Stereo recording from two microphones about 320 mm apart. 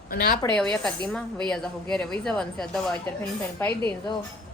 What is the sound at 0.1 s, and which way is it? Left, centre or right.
Speech, left.